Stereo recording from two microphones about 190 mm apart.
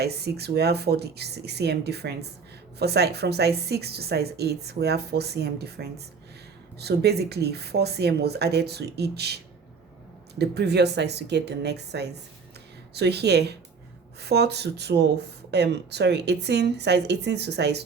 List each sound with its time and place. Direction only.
0.0 s speech: 60° right (ahead or behind)